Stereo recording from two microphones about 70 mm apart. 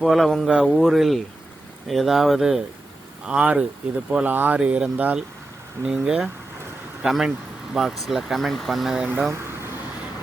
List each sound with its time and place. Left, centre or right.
0.0 s speech: centre